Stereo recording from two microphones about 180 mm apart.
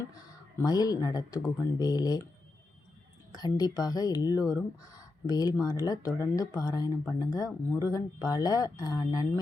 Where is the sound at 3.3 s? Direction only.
20° left (ahead or behind).